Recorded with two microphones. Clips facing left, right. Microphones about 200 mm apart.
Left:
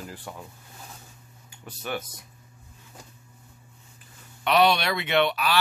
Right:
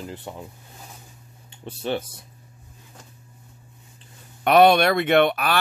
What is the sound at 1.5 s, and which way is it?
Speech, 30° right (ahead or behind).